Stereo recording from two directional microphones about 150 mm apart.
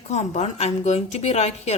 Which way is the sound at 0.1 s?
50° left (ahead or behind).